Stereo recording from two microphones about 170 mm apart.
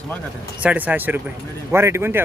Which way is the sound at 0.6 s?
10° right (ahead or behind).